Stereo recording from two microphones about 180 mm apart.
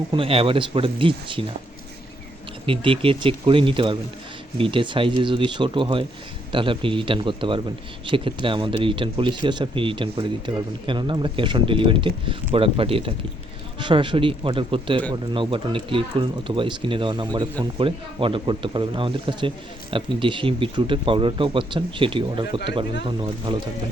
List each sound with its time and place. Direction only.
0.1 s speech: 30° right (ahead or behind)
2.6 s speech: 30° right (ahead or behind)